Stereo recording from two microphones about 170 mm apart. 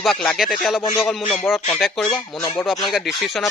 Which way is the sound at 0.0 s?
5° left (ahead or behind).